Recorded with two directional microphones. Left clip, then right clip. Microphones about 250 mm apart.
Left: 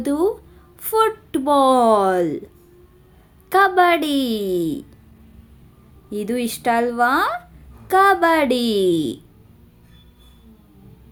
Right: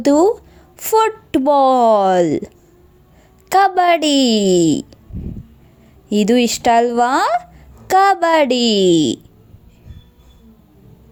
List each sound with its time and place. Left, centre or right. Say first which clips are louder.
0.0 s speech: right 8 dB; right
3.5 s speech: right 2 dB; right
6.1 s speech: right 9 dB; right